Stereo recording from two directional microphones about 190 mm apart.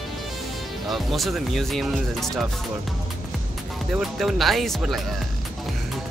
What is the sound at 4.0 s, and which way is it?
Speech, centre (ahead or behind).